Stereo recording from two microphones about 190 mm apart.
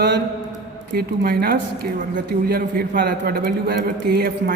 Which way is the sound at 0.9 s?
55° right (ahead or behind).